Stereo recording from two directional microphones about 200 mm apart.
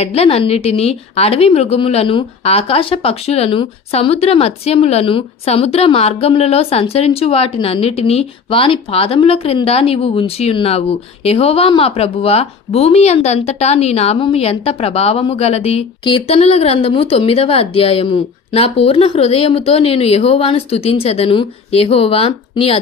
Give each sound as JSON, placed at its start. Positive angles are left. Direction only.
{"t": 0.0, "sound": "a woman's voice", "side_deg": 30}